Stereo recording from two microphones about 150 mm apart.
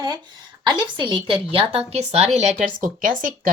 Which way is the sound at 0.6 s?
30° right (ahead or behind).